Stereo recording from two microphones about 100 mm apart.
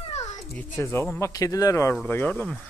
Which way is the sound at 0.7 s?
25° left (ahead or behind).